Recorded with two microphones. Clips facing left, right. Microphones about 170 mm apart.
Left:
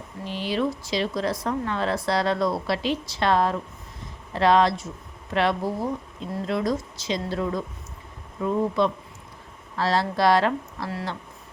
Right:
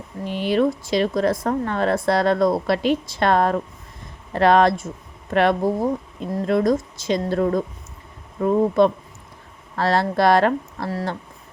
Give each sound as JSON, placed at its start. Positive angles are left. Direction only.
{"t": 0.3, "sound": "speech", "side_deg": -55}